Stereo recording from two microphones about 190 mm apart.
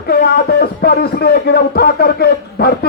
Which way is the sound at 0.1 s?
55° left (ahead or behind).